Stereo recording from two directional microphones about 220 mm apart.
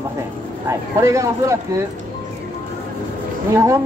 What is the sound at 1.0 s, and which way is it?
Speech, 15° right (ahead or behind).